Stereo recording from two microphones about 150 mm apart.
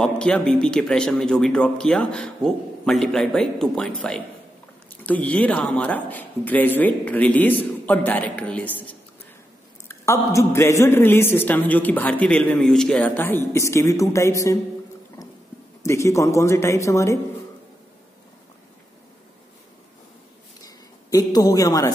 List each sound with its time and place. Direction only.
0.0 s a man's voice: 5° left (ahead or behind)
15.2 s a sound: 25° left (ahead or behind)
15.8 s a man's voice: 20° left (ahead or behind)
20.6 s speech: 25° left (ahead or behind)